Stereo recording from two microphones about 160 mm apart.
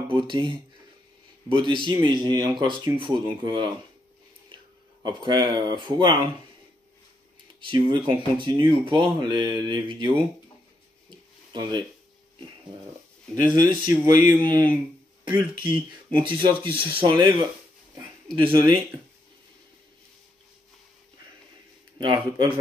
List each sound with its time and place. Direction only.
0.1 s speech: 30° right (ahead or behind)
4.5 s a sound: 30° right (ahead or behind)
5.0 s speech: 30° right (ahead or behind)
7.6 s speech: 30° right (ahead or behind)
11.1 s a sound: 30° right (ahead or behind)
13.3 s speech: 25° right (ahead or behind)
21.9 s speech: 30° right (ahead or behind)